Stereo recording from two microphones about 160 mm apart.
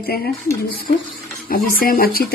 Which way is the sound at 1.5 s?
65° left (ahead or behind).